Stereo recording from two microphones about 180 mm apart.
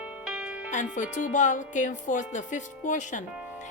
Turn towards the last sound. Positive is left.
turn(degrees=45)  # may be behind; listen again after turning